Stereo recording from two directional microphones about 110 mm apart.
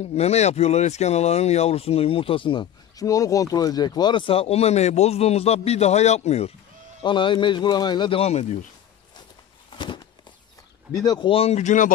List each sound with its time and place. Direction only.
0.1 s speech: 80° left; by 2.7 s 50° left (ahead or behind)
3.0 s speech: 30° left (ahead or behind); by 6.5 s 85° left
7.0 s a man's voice: 45° left (ahead or behind)
8.2 s speech: 85° left
9.7 s a sound: 45° left (ahead or behind)
11.0 s speech: 40° left (ahead or behind)
11.2 s speech: 60° left (ahead or behind)